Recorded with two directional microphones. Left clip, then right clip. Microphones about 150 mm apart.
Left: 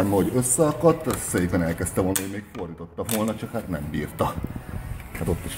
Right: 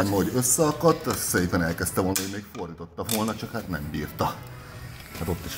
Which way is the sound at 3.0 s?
10° left (ahead or behind).